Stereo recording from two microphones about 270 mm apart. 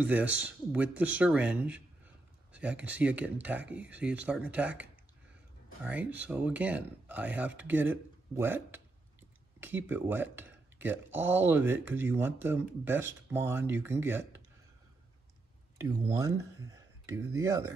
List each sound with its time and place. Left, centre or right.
0.0 s speech: centre
2.8 s speech: centre
5.9 s speech: centre
16.1 s speech: centre